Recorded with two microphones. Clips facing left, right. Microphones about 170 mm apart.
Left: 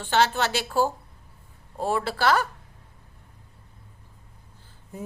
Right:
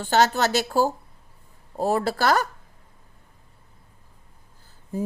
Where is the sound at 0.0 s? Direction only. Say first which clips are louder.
Right 3 dB; 40° right (ahead or behind).